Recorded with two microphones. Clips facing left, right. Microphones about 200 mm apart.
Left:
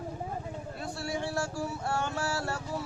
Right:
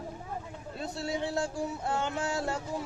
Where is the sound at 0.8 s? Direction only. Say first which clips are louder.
Right 2 dB; 20° right (ahead or behind).